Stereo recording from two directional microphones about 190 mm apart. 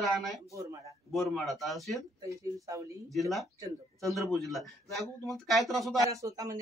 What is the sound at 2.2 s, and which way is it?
Speech, 15° right (ahead or behind).